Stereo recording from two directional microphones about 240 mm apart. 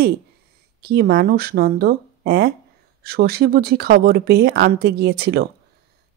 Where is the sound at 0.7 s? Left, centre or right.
Right.